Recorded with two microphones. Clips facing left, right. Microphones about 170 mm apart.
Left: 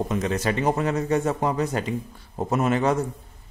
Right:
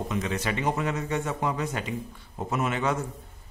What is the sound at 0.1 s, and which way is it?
Speech, 40° left (ahead or behind).